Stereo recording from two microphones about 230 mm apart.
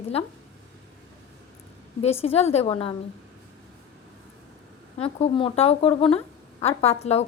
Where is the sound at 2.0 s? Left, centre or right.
Left.